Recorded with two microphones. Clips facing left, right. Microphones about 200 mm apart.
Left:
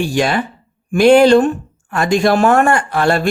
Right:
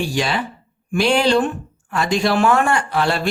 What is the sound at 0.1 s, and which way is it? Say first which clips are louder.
Speech: left 5 dB; 50° left (ahead or behind).